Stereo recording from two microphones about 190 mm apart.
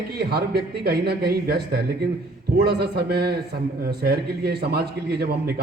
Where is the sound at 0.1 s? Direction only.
55° right (ahead or behind).